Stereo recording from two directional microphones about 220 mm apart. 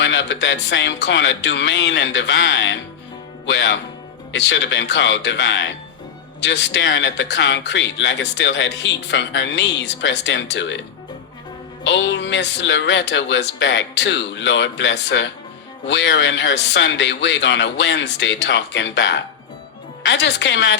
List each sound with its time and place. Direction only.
0.0 s speech: 55° left (ahead or behind)
11.8 s speech: 55° left (ahead or behind)